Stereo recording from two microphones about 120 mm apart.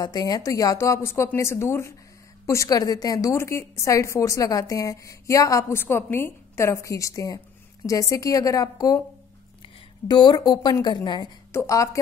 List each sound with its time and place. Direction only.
0.0 s a woman's voice: 35° left (ahead or behind)